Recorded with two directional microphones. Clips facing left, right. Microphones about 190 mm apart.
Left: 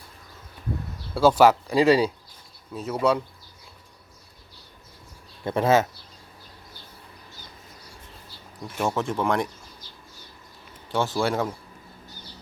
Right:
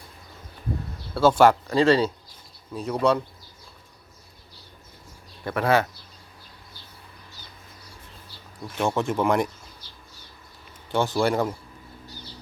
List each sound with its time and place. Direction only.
1.1 s speech: 10° left (ahead or behind)
5.5 s speech: 20° left (ahead or behind)
8.6 s speech: centre (ahead or behind)
10.9 s speech: centre (ahead or behind)